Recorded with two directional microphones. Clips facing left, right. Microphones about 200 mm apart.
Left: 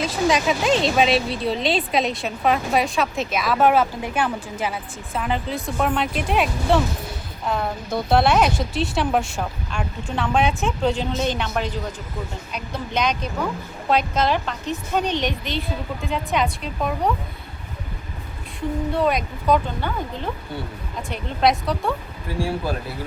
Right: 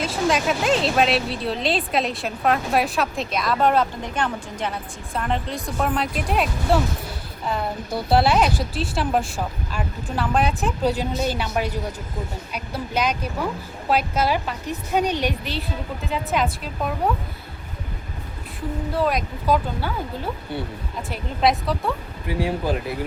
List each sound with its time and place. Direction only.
0.3 s speech: centre (ahead or behind)
18.9 s speech: centre (ahead or behind)
22.3 s speech: 20° right (ahead or behind)